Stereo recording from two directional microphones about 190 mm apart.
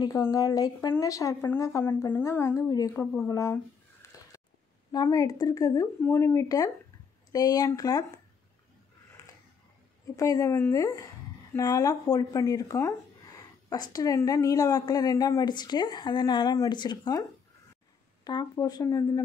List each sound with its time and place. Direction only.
0.0 s a woman's voice: 20° left (ahead or behind)
4.0 s a sound: 15° left (ahead or behind)
4.9 s a woman's voice: 20° left (ahead or behind)
10.1 s a woman's voice: 15° left (ahead or behind)
18.2 s speech: 20° left (ahead or behind)